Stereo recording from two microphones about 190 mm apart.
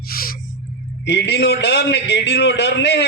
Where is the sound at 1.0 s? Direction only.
65° left (ahead or behind).